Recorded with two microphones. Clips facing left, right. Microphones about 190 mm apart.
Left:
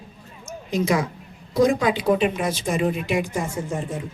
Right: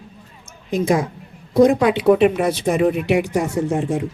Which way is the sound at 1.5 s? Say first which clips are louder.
Right 5 dB; 60° right (ahead or behind).